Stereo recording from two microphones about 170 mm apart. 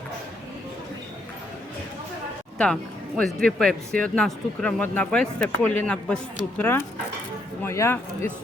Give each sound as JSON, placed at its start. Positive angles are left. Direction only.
{"t": 3.2, "sound": "speech", "side_deg": 5}